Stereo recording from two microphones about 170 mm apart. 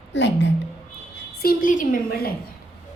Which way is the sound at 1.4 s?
55° left (ahead or behind).